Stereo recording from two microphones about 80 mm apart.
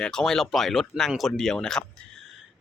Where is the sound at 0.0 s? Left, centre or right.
Centre.